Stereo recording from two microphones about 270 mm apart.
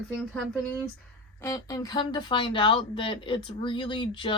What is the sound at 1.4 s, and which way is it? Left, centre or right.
Speech, centre.